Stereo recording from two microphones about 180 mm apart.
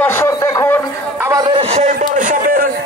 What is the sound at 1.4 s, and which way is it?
A man's voice, 30° right (ahead or behind).